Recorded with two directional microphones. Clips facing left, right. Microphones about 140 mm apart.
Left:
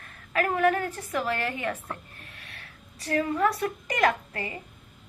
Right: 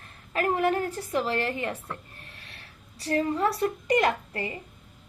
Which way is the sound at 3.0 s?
30° right (ahead or behind).